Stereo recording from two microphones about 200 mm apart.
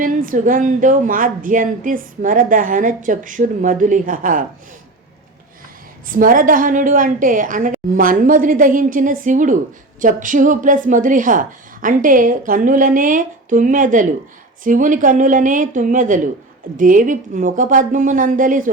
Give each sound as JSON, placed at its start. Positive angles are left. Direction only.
{"t": 0.0, "sound": "a woman's voice", "side_deg": -40}
{"t": 6.1, "sound": "a woman's voice", "side_deg": -45}